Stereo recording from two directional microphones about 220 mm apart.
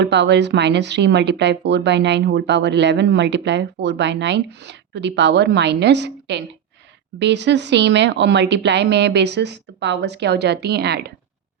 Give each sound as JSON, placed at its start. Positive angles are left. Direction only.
{"t": 0.0, "sound": "speech", "side_deg": -50}